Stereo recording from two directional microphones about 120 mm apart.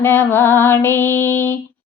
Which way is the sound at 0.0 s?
20° left (ahead or behind).